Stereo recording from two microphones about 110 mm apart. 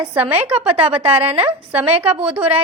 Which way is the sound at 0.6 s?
55° right (ahead or behind).